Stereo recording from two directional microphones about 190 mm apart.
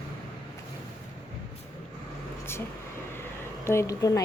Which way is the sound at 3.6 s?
15° left (ahead or behind).